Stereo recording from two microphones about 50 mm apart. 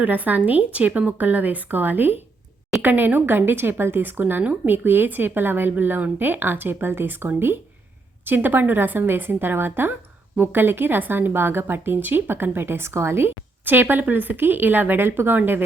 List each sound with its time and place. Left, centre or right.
0.0 s speech: right
13.7 s speech: right